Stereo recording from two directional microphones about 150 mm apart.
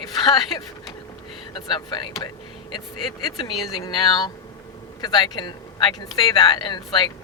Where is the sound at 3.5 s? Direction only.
Centre (ahead or behind).